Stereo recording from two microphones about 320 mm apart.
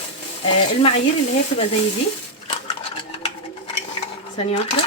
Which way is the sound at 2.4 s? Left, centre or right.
Centre.